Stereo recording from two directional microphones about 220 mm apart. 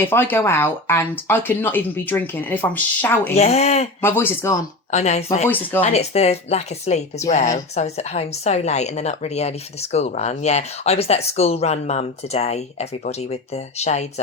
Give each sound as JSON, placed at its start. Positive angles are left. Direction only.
{"t": 0.0, "sound": "speech", "side_deg": 10}
{"t": 3.3, "sound": "a woman's voice", "side_deg": 30}
{"t": 4.0, "sound": "speech", "side_deg": 10}
{"t": 4.9, "sound": "speech", "side_deg": 30}
{"t": 5.5, "sound": "speech", "side_deg": 10}
{"t": 5.8, "sound": "a woman's voice", "side_deg": 30}